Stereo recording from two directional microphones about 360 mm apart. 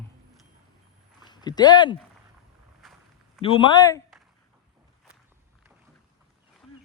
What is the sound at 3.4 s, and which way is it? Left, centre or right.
Speech, centre.